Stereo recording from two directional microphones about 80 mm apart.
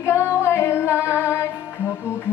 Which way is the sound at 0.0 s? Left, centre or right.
Left.